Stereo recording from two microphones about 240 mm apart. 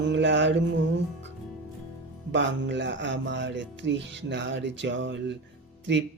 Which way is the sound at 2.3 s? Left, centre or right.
Right.